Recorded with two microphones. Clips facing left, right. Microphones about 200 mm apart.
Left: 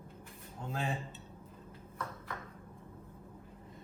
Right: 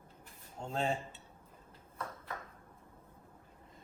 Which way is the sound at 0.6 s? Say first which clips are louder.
Right 3 dB; 30° right (ahead or behind).